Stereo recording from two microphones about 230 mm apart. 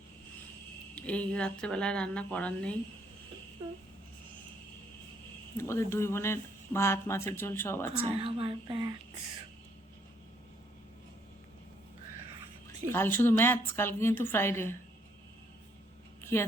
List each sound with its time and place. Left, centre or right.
0.9 s speech: centre
5.5 s speech: centre
8.2 s speech: right
12.9 s speech: centre
16.2 s a sound: centre